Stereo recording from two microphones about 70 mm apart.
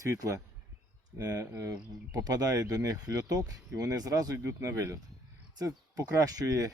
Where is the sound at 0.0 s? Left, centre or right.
Right.